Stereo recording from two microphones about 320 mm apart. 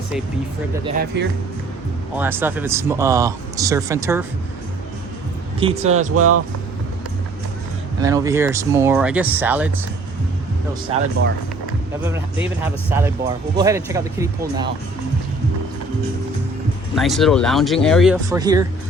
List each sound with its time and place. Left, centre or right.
0.9 s speech: right
2.1 s speech: centre
5.5 s speech: centre
6.1 s speech: right
8.0 s speech: centre
10.9 s speech: centre
12.9 s speech: centre
16.9 s speech: centre